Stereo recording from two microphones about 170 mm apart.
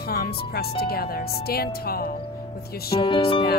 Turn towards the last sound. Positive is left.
turn(degrees=30)  # may be behind; listen again after turning